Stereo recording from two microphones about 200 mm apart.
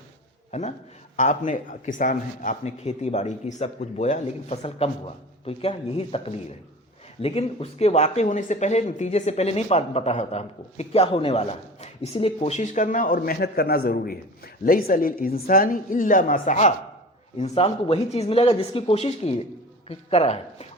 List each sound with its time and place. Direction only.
1.1 s speech: 35° left (ahead or behind)